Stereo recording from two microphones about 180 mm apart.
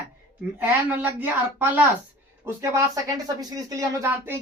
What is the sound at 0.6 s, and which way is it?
Speech, 10° right (ahead or behind).